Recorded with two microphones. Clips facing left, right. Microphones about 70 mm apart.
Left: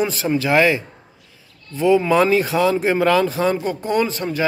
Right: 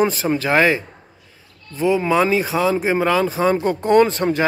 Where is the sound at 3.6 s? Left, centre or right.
Right.